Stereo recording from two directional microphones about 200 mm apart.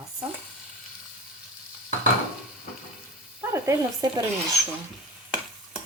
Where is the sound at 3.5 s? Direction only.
15° right (ahead or behind).